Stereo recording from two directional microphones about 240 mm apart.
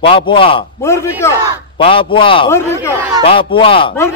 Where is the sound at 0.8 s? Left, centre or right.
Centre.